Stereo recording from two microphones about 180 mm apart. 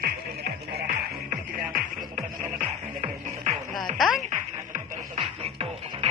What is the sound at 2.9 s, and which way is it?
Music, 35° right (ahead or behind).